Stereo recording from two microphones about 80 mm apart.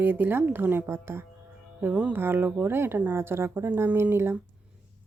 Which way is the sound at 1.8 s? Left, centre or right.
Centre.